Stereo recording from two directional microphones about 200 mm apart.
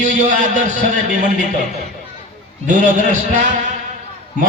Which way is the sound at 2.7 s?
40° right (ahead or behind).